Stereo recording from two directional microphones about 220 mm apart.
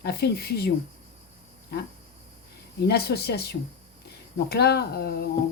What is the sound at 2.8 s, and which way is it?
Speech, 45° left (ahead or behind).